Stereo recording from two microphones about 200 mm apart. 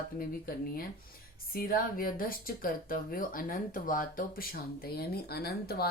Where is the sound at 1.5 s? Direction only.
45° left (ahead or behind).